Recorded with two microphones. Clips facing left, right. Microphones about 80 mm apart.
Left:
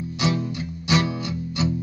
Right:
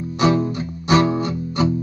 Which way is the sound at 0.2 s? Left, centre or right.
Right.